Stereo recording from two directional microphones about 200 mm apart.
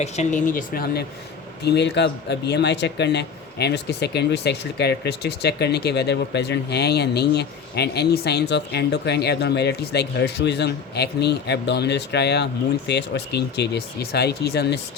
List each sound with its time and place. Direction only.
0.0 s speech: 35° left (ahead or behind); by 14.8 s 55° left (ahead or behind)